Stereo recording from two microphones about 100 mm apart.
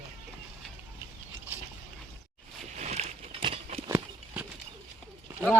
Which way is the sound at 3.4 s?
75° right (ahead or behind).